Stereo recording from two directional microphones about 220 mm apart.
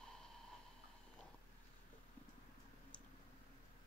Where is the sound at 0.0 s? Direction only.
Centre (ahead or behind).